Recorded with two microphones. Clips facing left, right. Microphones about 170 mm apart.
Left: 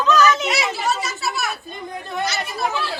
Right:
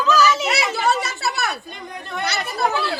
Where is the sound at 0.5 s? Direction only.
60° right (ahead or behind).